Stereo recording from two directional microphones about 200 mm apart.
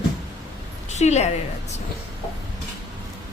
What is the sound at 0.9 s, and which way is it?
Speech, 35° left (ahead or behind).